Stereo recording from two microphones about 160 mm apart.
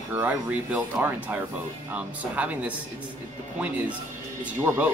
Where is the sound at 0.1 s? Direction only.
10° right (ahead or behind).